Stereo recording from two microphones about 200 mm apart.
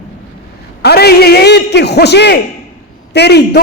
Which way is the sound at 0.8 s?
55° left (ahead or behind).